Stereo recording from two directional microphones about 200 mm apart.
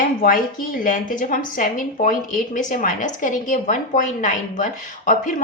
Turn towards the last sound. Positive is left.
turn(degrees=40)  # may be behind; listen again after turning